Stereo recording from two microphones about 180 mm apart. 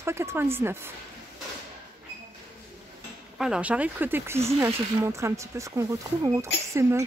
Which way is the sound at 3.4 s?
5° right (ahead or behind).